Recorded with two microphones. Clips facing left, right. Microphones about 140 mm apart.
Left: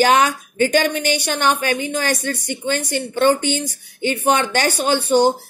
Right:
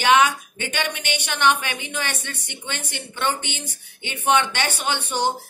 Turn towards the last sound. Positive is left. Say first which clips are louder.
# left 9 dB
turn(degrees=40)  # may be behind; listen again after turning